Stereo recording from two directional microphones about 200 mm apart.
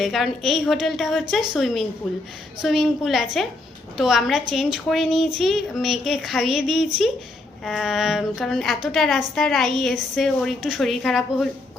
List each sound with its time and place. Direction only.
0.0 s a woman's voice: centre (ahead or behind)